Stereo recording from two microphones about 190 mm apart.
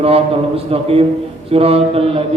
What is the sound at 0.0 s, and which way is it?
Mantra, 30° right (ahead or behind).